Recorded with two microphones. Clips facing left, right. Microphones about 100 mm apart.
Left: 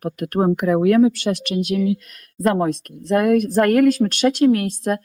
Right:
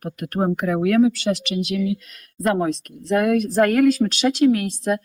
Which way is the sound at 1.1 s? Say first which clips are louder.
Even; 50° left (ahead or behind).